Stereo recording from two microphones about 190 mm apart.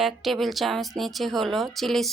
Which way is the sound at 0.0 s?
Centre (ahead or behind).